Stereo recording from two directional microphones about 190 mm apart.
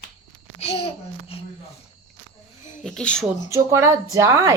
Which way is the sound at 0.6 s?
30° left (ahead or behind).